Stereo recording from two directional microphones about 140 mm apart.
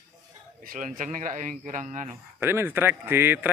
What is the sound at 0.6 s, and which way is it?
Speech, 85° right.